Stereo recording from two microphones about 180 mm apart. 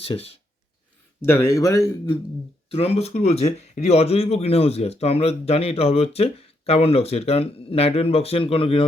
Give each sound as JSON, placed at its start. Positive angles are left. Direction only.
{"t": 0.0, "sound": "speech", "side_deg": 30}
{"t": 1.2, "sound": "speech", "side_deg": 15}
{"t": 2.6, "sound": "speech", "side_deg": 35}